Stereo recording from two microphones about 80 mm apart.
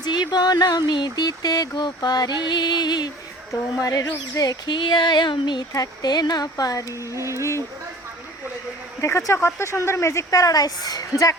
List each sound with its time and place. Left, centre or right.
0.0 s speech: left
3.5 s a woman's voice: left
5.7 s speech: left
9.0 s a woman's voice: left